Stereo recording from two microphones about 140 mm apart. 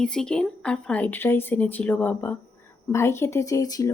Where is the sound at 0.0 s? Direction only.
5° left (ahead or behind).